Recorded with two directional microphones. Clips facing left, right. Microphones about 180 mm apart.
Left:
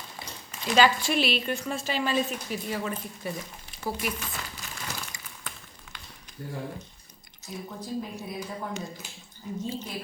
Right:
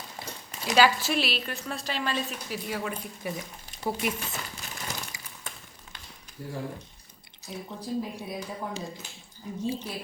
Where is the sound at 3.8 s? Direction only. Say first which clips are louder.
Right 2 dB; 20° right (ahead or behind).